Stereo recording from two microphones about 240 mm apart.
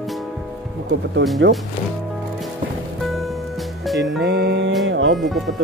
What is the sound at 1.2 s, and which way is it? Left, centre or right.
Speech, right.